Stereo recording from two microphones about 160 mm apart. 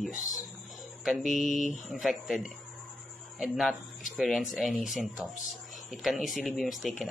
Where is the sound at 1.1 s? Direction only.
Centre (ahead or behind).